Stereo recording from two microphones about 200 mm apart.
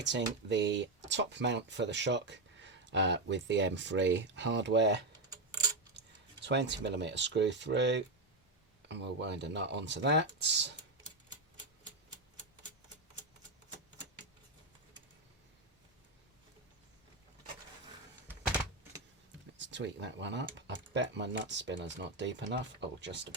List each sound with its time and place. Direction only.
0.4 s speech: 60° right (ahead or behind)
5.1 s a sound: 20° right (ahead or behind)
6.4 s speech: 60° right (ahead or behind)
19.5 s speech: 65° right (ahead or behind)